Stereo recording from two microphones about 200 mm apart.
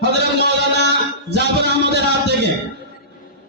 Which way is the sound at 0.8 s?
55° right (ahead or behind).